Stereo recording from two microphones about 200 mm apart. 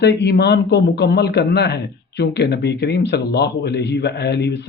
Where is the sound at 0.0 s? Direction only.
55° left (ahead or behind).